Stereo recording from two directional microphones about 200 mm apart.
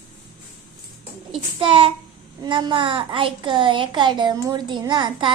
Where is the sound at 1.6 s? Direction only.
25° right (ahead or behind).